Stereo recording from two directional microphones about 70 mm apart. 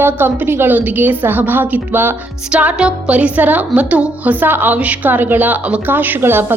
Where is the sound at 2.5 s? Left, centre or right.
Centre.